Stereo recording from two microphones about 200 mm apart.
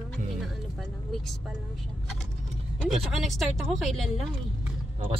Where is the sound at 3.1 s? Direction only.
Centre (ahead or behind).